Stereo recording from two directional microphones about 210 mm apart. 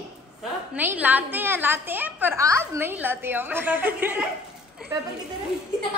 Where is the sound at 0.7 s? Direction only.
10° right (ahead or behind).